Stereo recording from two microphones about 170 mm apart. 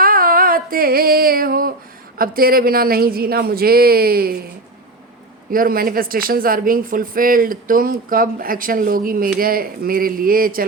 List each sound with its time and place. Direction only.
0.0 s a sound: 55° right (ahead or behind)
2.1 s speech: 60° right (ahead or behind)
5.5 s speech: 55° right (ahead or behind)